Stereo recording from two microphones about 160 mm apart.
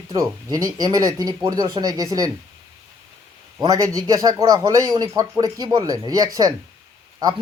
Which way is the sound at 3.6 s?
20° right (ahead or behind).